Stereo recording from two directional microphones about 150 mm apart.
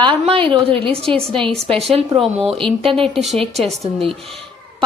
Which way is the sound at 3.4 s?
40° right (ahead or behind).